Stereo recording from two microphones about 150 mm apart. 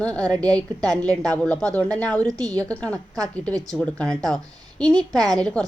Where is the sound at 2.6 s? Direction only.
10° left (ahead or behind).